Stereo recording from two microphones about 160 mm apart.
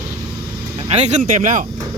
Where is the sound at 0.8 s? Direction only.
40° right (ahead or behind).